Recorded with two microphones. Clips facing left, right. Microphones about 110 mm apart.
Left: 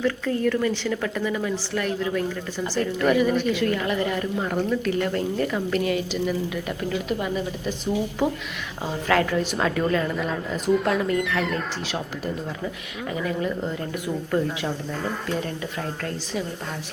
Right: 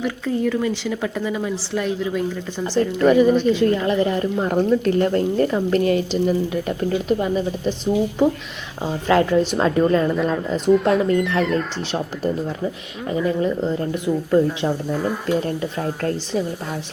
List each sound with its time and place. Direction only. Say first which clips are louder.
0.0 s a woman's voice: right 1 dB; 15° right (ahead or behind)
8.8 s a woman's voice: right 4 dB; 20° right (ahead or behind)
10.8 s speech: right 5 dB; centre (ahead or behind)
13.1 s a woman's voice: right 6 dB; 25° right (ahead or behind)
14.7 s speech: right 6 dB; 10° right (ahead or behind)
15.4 s a woman's voice: right 6 dB; 40° right (ahead or behind)